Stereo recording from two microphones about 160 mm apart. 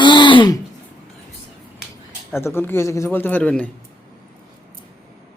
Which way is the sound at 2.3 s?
15° left (ahead or behind).